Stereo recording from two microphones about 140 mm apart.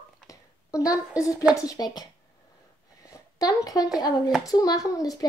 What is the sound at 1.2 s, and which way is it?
Speech, 25° left (ahead or behind).